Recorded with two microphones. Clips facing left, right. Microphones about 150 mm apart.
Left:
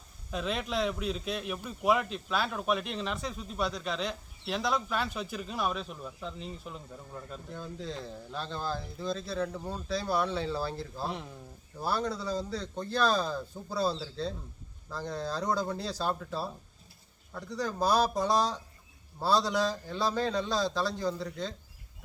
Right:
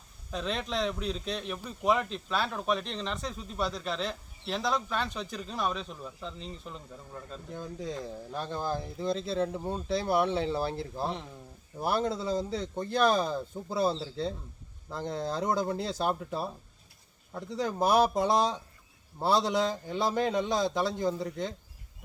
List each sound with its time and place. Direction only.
0.3 s speech: 5° left (ahead or behind)
7.5 s speech: 15° right (ahead or behind)